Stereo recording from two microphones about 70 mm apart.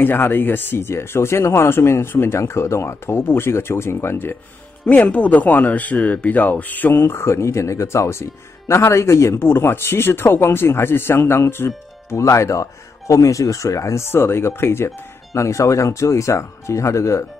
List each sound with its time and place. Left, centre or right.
0.0 s speech: left
4.8 s speech: centre; by 17.3 s left